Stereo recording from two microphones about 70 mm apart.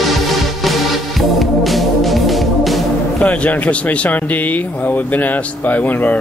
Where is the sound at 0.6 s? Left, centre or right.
Centre.